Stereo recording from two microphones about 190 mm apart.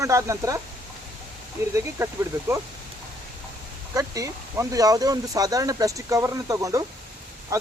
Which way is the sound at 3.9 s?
20° right (ahead or behind).